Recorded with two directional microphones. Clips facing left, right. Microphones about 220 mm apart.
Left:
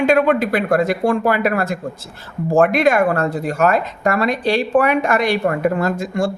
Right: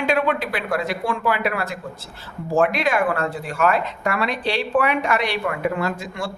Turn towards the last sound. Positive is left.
turn(degrees=45)  # may be behind; listen again after turning